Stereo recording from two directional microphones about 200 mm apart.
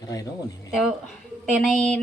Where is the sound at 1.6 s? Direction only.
5° left (ahead or behind).